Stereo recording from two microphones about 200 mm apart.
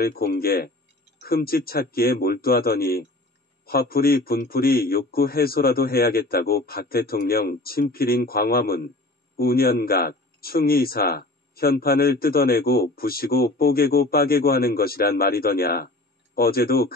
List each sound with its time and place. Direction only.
0.0 s speech: 50° left (ahead or behind)